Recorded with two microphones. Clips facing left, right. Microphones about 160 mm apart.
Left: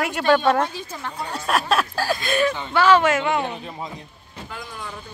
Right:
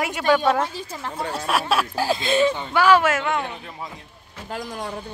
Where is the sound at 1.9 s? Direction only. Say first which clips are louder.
Right 2 dB; 25° right (ahead or behind); by 3.2 s 5° right (ahead or behind).